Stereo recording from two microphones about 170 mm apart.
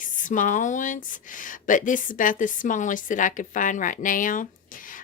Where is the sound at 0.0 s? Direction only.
50° left (ahead or behind).